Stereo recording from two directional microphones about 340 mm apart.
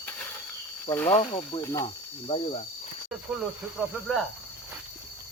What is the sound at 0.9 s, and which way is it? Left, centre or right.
Speech, centre.